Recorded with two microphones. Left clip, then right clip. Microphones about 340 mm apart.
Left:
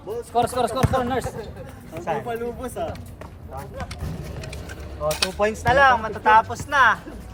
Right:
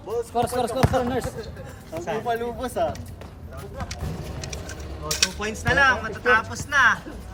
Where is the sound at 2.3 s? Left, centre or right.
Right.